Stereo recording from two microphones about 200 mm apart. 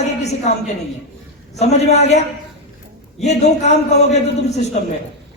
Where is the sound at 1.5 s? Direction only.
35° left (ahead or behind).